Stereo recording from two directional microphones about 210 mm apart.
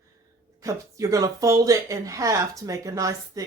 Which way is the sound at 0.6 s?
15° right (ahead or behind).